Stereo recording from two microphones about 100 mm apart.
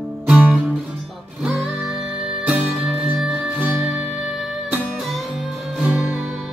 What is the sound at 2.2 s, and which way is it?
Music, 10° right (ahead or behind).